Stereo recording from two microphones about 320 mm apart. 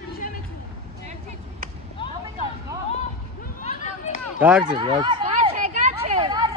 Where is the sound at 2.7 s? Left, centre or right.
Centre.